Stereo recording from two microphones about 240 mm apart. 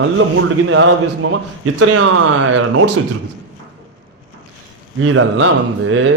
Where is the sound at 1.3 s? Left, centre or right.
Right.